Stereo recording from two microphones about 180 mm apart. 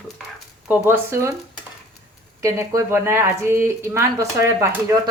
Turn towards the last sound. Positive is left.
turn(degrees=-15)  # may be behind; listen again after turning